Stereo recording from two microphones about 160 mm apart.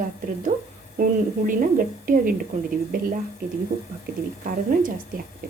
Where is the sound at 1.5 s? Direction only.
60° right (ahead or behind).